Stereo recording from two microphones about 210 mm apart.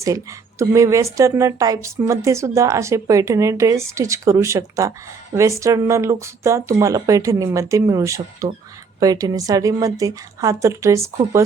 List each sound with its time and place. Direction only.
0.6 s speech: 15° right (ahead or behind)